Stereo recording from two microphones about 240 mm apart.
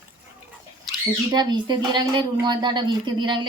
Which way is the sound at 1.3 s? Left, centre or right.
Centre.